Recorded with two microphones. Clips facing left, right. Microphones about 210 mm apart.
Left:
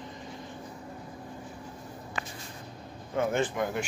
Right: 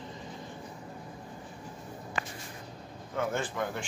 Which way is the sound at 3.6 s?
15° left (ahead or behind).